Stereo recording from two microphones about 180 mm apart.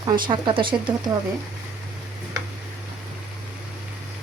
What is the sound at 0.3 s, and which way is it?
Speech, 25° right (ahead or behind).